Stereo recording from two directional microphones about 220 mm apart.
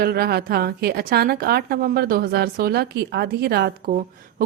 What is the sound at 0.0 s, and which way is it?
A woman's voice, 45° right (ahead or behind).